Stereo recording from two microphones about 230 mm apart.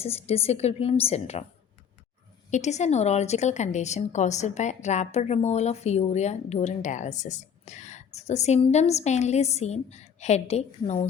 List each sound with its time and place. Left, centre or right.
0.0 s speech: left
2.5 s speech: left